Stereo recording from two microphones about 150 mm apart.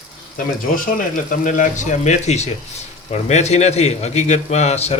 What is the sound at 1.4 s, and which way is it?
A man's voice, 55° left (ahead or behind).